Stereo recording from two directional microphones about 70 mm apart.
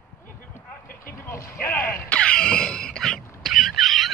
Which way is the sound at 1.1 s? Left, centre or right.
Left.